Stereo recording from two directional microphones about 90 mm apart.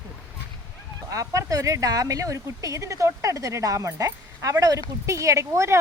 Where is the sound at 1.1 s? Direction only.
40° right (ahead or behind).